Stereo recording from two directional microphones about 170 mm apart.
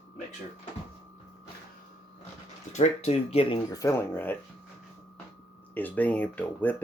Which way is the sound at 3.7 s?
15° left (ahead or behind).